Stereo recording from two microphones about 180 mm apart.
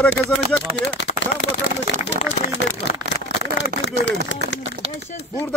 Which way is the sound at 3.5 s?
80° left.